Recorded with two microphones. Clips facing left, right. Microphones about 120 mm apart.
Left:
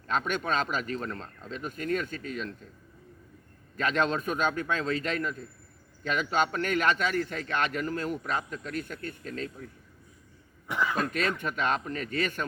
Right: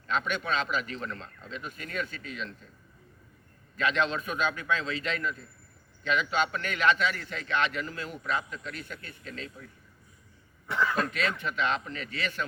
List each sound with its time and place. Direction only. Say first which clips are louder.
0.1 s speech: left 1 dB; 45° left (ahead or behind)
3.8 s speech: left 1 dB; 45° left (ahead or behind)
10.7 s speech: right 1 dB; 15° left (ahead or behind)
10.9 s speech: left 1 dB; 45° left (ahead or behind)